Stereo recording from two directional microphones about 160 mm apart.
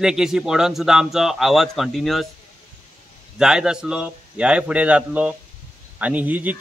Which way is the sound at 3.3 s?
5° right (ahead or behind).